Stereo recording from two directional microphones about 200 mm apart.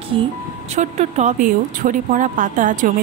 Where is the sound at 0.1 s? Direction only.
25° right (ahead or behind).